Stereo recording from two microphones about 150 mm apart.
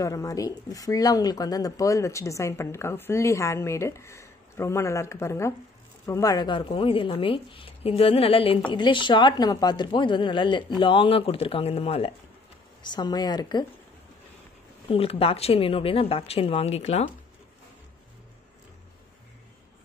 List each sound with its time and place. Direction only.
0.0 s a woman's voice: 20° left (ahead or behind); by 12.1 s 40° left (ahead or behind)
12.8 s speech: 30° left (ahead or behind)
14.9 s a woman's voice: 40° left (ahead or behind)